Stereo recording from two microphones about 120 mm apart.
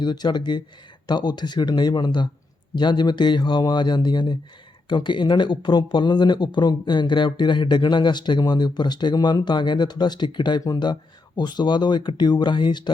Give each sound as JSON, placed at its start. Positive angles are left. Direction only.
{"t": 0.0, "sound": "speech", "side_deg": 35}